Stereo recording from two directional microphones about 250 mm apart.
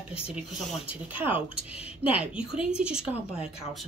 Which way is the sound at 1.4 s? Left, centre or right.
Left.